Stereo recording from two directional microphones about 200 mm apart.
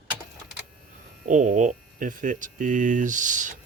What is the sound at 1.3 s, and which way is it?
Speech, 40° right (ahead or behind).